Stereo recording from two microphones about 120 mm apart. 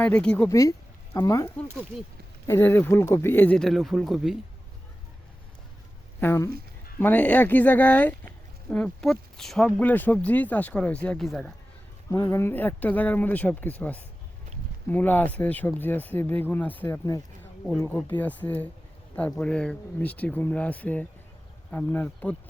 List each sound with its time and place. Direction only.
0.0 s speech: 10° left (ahead or behind)
0.4 s speech: 30° left (ahead or behind)
2.5 s speech: 20° left (ahead or behind)
3.6 s speech: centre (ahead or behind)
6.1 s speech: 20° left (ahead or behind); by 11.5 s centre (ahead or behind)
12.1 s speech: 25° left (ahead or behind)